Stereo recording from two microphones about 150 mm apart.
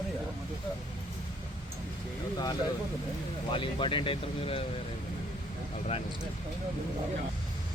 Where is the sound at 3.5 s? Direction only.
35° left (ahead or behind).